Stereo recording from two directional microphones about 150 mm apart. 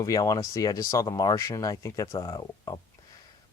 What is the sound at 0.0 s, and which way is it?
Speech, 20° left (ahead or behind).